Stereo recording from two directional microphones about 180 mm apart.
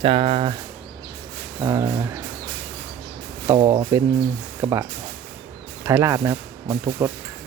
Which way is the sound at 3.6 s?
25° right (ahead or behind).